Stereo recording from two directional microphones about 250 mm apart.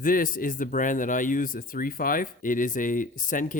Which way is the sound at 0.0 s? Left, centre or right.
Left.